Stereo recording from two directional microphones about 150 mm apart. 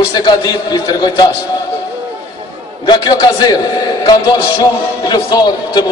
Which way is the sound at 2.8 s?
30° left (ahead or behind).